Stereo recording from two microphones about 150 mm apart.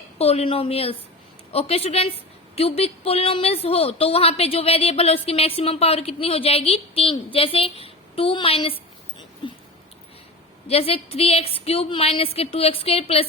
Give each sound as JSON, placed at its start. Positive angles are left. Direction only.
{"t": 0.2, "sound": "a woman's voice", "side_deg": 45}
{"t": 9.4, "sound": "dog", "side_deg": 35}
{"t": 10.7, "sound": "a woman's voice", "side_deg": 40}